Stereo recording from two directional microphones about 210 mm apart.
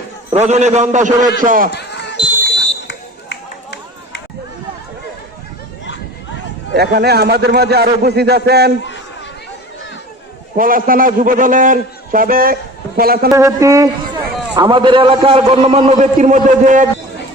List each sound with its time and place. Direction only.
0.3 s a man's voice: 30° right (ahead or behind)
1.7 s basketball bounce: 55° left (ahead or behind)
6.7 s a man's voice: 50° right (ahead or behind)
10.6 s a man's voice: 40° right (ahead or behind)
13.3 s a man's voice: 15° right (ahead or behind); by 16.8 s 35° right (ahead or behind)